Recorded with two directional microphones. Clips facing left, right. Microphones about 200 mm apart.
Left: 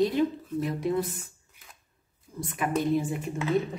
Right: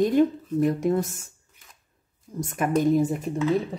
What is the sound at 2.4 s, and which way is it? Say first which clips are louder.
Speech: right 5 dB; 45° right (ahead or behind).